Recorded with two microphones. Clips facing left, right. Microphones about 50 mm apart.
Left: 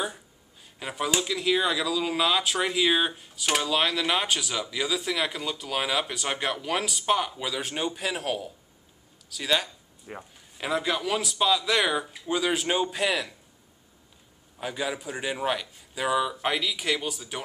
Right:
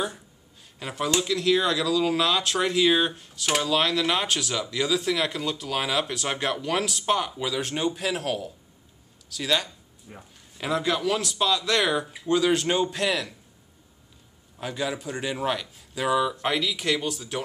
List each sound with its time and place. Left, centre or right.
0.7 s speech: centre
10.1 s speech: left
10.6 s speech: centre
14.6 s speech: centre